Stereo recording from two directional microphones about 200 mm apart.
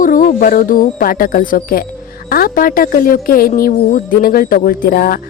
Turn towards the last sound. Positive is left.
turn(degrees=50)  # may be behind; listen again after turning